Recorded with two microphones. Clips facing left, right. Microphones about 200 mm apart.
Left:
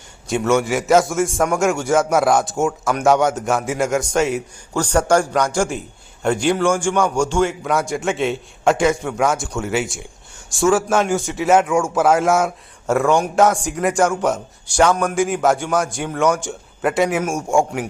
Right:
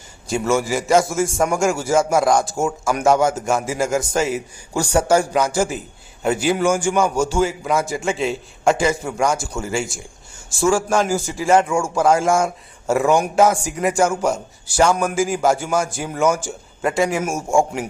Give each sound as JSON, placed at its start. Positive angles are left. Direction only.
{"t": 0.3, "sound": "a man's voice", "side_deg": 0}